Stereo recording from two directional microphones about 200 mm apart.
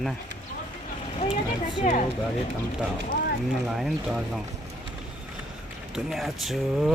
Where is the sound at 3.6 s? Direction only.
Centre (ahead or behind).